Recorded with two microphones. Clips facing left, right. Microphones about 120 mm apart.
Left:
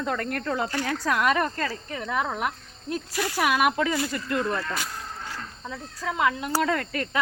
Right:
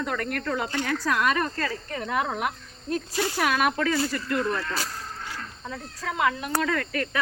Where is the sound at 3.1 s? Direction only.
25° right (ahead or behind).